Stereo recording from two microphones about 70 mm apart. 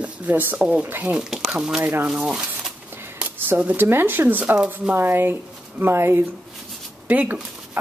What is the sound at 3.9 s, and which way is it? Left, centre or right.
Speech, right.